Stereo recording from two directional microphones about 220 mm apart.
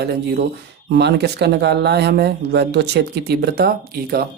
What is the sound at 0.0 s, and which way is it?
Speech, 45° right (ahead or behind).